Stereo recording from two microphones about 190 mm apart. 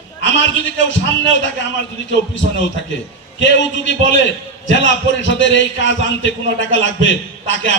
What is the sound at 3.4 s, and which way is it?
A man's voice, 75° left (ahead or behind).